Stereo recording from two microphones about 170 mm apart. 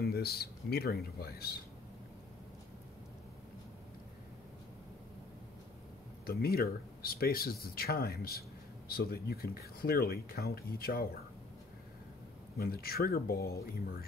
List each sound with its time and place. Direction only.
0.0 s speech: 65° left (ahead or behind)
6.2 s speech: 65° left (ahead or behind)
12.5 s speech: 65° left (ahead or behind)